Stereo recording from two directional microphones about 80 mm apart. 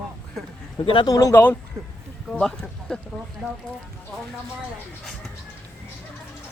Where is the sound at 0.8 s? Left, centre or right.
Left.